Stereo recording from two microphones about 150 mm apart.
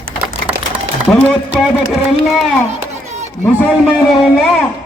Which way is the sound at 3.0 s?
45° right (ahead or behind).